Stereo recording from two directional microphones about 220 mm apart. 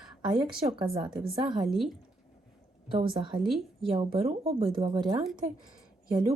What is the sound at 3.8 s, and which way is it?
Speech, 25° right (ahead or behind).